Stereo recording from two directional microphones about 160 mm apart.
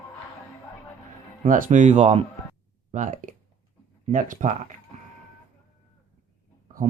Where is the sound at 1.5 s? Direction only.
55° right (ahead or behind).